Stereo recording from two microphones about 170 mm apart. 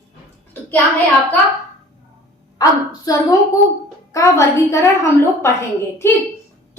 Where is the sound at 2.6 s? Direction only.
20° left (ahead or behind).